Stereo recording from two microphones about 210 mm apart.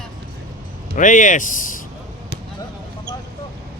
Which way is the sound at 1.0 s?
35° left (ahead or behind).